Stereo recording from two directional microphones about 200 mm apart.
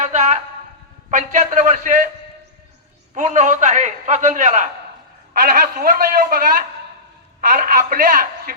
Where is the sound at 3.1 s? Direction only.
40° right (ahead or behind).